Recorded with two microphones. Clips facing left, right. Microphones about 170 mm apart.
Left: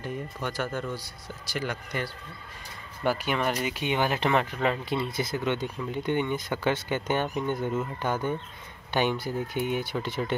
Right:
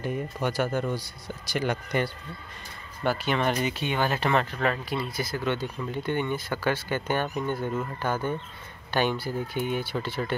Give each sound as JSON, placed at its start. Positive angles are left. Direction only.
{"t": 0.0, "sound": "speech", "side_deg": -10}
{"t": 3.0, "sound": "speech", "side_deg": 10}